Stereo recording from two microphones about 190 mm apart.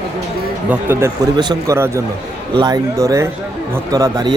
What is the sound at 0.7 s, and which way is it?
Speech, 10° right (ahead or behind).